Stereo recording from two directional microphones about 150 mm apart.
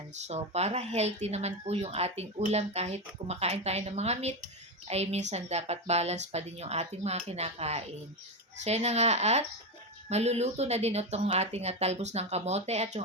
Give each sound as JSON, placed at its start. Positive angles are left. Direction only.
{"t": 0.3, "sound": "speech", "side_deg": -45}